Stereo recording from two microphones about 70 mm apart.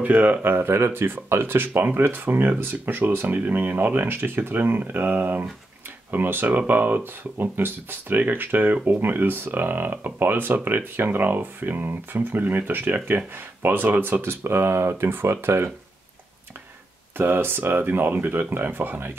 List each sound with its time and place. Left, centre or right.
0.0 s speech: right
17.2 s speech: right